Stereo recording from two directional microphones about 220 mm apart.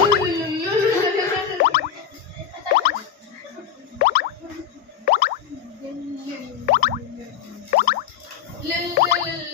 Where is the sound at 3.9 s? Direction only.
40° left (ahead or behind).